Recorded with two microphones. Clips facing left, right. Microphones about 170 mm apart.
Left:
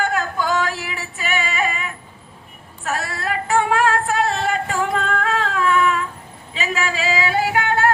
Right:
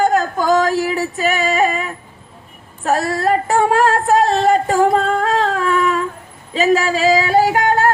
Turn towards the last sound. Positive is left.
turn(degrees=-40)  # may be behind; listen again after turning